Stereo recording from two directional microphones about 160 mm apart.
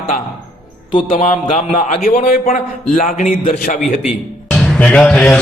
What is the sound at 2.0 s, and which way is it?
Speech, 60° left (ahead or behind).